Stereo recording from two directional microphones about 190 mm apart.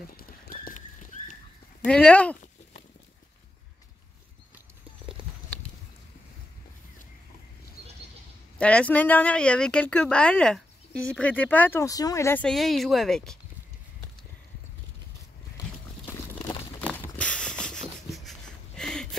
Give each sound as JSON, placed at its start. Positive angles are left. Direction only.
{"t": 0.2, "sound": "horse", "side_deg": 50}
{"t": 1.9, "sound": "speech", "side_deg": 5}
{"t": 8.5, "sound": "speech", "side_deg": 5}
{"t": 12.4, "sound": "speech", "side_deg": 0}
{"t": 16.8, "sound": "a sound", "side_deg": 5}